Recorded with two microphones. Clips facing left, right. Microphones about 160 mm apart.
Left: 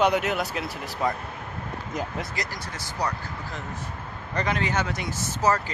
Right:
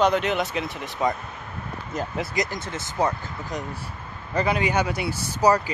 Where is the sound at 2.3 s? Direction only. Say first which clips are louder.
Right 6 dB; 20° right (ahead or behind).